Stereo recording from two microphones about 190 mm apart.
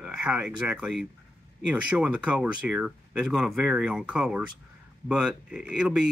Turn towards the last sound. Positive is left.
turn(degrees=-5)  # may be behind; listen again after turning